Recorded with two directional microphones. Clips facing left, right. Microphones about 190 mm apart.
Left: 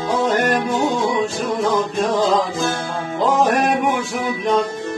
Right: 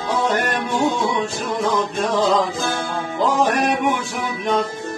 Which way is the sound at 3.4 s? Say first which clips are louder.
Left 2 dB; centre (ahead or behind).